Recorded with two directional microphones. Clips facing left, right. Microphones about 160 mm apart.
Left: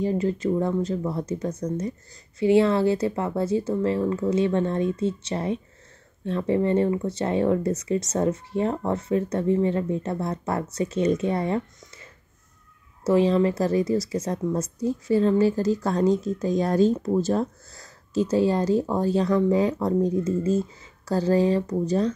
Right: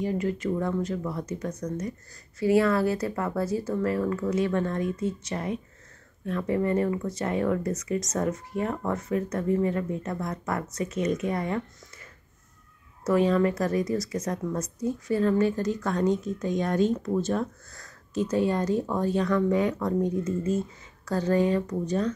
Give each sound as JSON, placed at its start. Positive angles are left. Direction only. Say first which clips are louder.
{"t": 0.0, "sound": "a woman's voice", "louder": "left 4 dB", "side_deg": 30}